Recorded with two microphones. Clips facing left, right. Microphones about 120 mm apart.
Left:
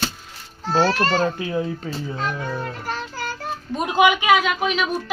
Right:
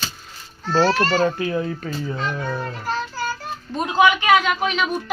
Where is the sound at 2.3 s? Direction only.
10° right (ahead or behind).